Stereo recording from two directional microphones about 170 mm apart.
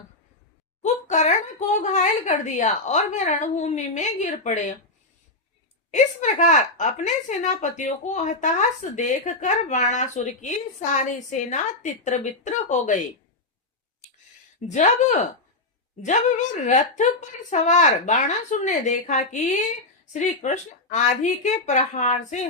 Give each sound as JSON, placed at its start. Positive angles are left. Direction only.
{"t": 0.8, "sound": "a child's voice", "side_deg": 45}
{"t": 5.9, "sound": "a woman's voice", "side_deg": 45}
{"t": 14.6, "sound": "speech", "side_deg": 40}
{"t": 16.0, "sound": "a woman's voice", "side_deg": 45}